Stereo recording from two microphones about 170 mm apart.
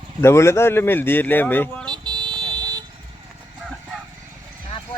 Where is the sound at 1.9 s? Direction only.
25° right (ahead or behind).